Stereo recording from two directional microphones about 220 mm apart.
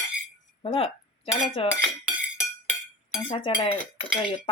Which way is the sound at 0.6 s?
25° left (ahead or behind).